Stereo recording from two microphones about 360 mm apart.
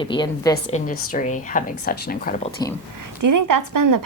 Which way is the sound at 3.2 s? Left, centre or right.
Right.